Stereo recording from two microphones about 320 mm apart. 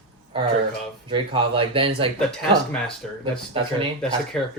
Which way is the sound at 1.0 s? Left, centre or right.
Centre.